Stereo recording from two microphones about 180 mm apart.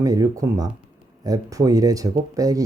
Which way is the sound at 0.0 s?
20° right (ahead or behind).